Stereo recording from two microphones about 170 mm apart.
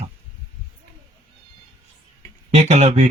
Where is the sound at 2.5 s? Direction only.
40° right (ahead or behind).